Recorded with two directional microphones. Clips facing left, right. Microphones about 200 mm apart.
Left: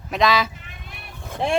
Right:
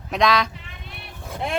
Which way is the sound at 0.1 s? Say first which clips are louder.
Even; centre (ahead or behind).